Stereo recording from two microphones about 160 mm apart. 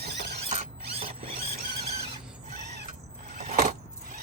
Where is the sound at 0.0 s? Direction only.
90° right.